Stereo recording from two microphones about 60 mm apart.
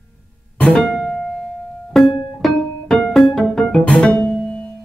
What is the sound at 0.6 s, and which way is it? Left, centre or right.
Music, centre.